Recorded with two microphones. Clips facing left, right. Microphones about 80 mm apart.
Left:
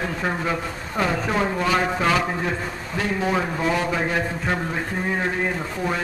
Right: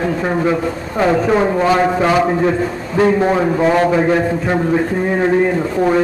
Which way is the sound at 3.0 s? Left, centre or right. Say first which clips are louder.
Right 11 dB; right.